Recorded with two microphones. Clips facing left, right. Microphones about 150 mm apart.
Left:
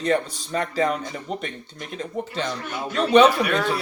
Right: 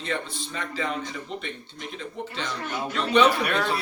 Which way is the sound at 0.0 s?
45° left (ahead or behind).